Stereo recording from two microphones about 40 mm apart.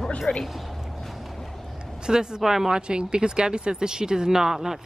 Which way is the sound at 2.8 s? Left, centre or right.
Right.